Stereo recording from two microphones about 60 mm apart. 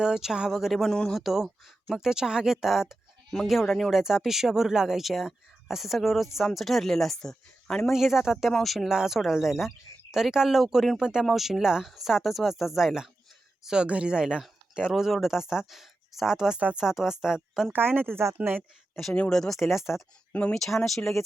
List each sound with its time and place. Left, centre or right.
0.0 s speech: centre
7.9 s speech: centre
13.7 s speech: centre
17.7 s speech: right
19.3 s speech: centre